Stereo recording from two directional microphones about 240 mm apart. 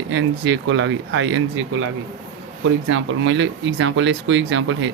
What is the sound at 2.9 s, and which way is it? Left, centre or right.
Speech, right.